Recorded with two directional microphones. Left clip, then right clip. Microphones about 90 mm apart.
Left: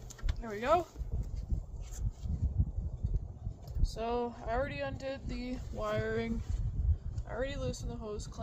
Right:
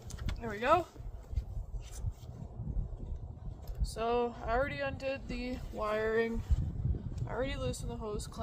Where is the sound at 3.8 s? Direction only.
55° right (ahead or behind).